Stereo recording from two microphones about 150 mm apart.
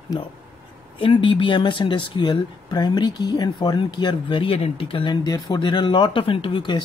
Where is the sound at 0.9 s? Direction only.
35° left (ahead or behind).